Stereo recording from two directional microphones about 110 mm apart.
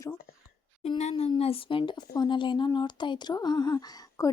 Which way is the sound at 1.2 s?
60° left (ahead or behind).